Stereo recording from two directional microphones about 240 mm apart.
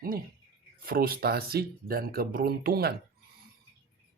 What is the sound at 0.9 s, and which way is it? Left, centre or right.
Speech, right.